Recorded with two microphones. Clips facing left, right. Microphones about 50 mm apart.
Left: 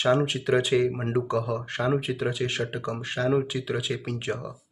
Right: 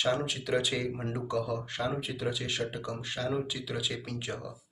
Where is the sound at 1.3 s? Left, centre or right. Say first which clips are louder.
Left 5 dB; left.